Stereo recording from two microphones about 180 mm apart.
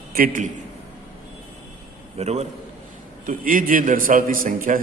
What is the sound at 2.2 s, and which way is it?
Speech, 35° right (ahead or behind).